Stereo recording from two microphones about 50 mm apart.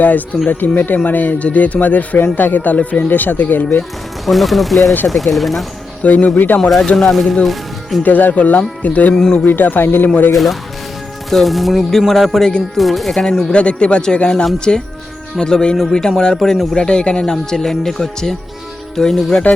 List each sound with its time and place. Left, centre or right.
0.4 s speech: left
4.3 s speech: centre
6.0 s speech: left
6.6 s speech: centre
7.1 s speech: centre
8.0 s speech: left
9.1 s speech: centre
9.5 s speech: left
10.3 s speech: centre
13.5 s speech: left